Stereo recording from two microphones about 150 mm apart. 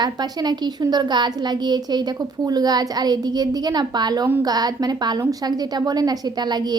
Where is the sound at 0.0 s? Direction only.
30° right (ahead or behind).